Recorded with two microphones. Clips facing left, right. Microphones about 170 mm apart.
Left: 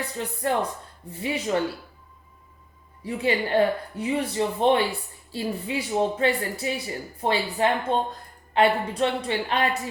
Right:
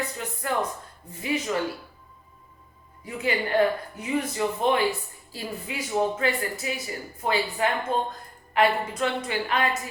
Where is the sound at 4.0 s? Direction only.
30° left (ahead or behind).